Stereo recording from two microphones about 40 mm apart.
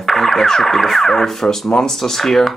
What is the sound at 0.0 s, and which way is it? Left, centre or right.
Speech, centre.